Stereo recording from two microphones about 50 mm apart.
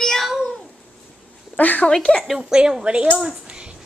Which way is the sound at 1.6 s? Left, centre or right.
Left.